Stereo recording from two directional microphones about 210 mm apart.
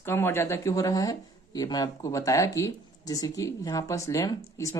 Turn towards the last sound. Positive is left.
turn(degrees=15)  # may be behind; listen again after turning